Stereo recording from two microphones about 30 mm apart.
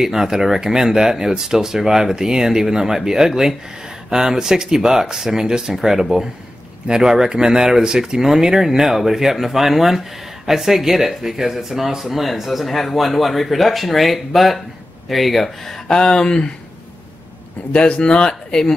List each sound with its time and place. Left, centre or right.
0.0 s speech: centre
15.9 s speech: left
17.7 s speech: left